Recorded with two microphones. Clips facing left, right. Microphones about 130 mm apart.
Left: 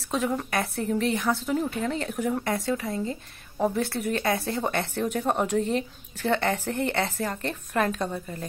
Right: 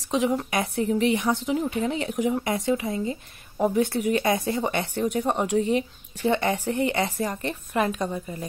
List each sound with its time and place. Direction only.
0.1 s a woman's voice: 10° right (ahead or behind)